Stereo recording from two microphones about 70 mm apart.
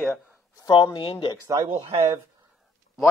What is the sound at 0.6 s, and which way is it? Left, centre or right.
Speech, left.